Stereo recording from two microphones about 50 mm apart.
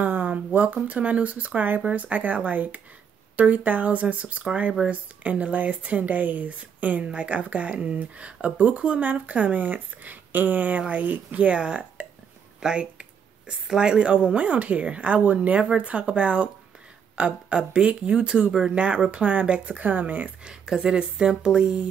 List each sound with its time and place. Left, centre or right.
0.0 s speech: right
20.4 s speech: centre